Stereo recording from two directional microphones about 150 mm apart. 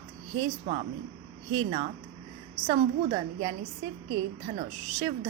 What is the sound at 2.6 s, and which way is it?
A woman's voice, 35° right (ahead or behind).